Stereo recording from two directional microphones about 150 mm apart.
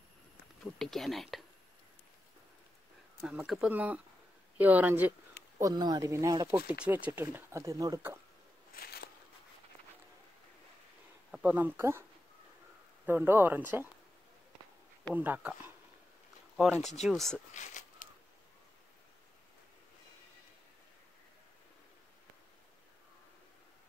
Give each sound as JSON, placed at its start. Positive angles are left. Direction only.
{"t": 0.7, "sound": "speech", "side_deg": 0}
{"t": 3.2, "sound": "speech", "side_deg": -5}
{"t": 5.6, "sound": "speech", "side_deg": -25}
{"t": 6.5, "sound": "speech", "side_deg": -10}
{"t": 8.7, "sound": "a sound", "side_deg": 90}
{"t": 11.3, "sound": "speech", "side_deg": -10}
{"t": 13.0, "sound": "speech", "side_deg": -15}
{"t": 15.1, "sound": "speech", "side_deg": -10}
{"t": 16.9, "sound": "speech", "side_deg": 0}
{"t": 17.6, "sound": "a sound", "side_deg": 55}